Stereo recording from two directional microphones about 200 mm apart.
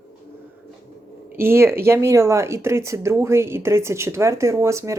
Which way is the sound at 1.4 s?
10° right (ahead or behind).